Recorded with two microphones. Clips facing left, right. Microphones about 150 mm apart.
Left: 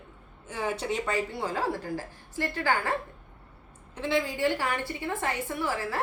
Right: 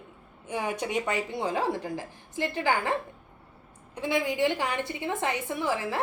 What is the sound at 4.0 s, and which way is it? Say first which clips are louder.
A woman's voice: right 1 dB; 15° right (ahead or behind).